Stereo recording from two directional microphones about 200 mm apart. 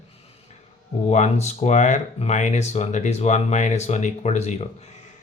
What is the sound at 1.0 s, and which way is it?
Speech, 35° left (ahead or behind).